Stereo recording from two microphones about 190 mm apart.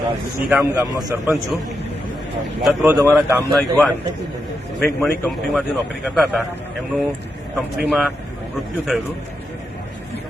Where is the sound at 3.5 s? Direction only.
Centre (ahead or behind).